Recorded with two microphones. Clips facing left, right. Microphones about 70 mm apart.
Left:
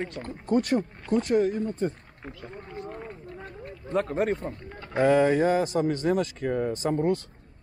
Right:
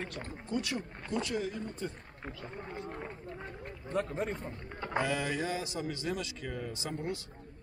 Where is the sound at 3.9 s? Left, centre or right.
Left.